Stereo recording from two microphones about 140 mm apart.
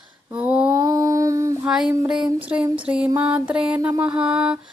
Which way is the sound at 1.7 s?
5° right (ahead or behind).